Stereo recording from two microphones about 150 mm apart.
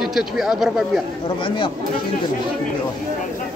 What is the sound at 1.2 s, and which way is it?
Speech, 35° left (ahead or behind).